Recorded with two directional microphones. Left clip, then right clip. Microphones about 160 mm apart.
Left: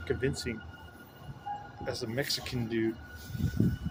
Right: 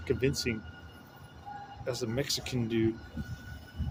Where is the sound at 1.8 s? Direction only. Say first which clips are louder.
Right 1 dB; 15° right (ahead or behind).